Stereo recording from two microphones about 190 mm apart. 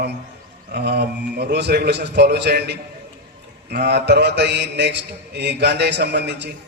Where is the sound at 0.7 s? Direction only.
60° right (ahead or behind).